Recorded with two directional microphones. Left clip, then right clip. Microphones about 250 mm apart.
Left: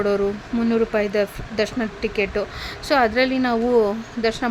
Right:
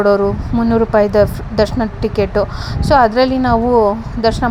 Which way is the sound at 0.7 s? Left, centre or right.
Centre.